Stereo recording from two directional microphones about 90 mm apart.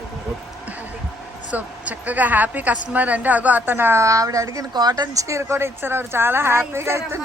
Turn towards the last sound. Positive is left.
turn(degrees=-30)  # may be behind; listen again after turning